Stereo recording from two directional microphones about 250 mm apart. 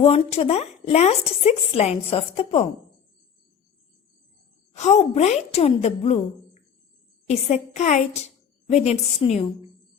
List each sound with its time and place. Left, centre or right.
0.0 s a woman's voice: left
4.7 s a woman's voice: left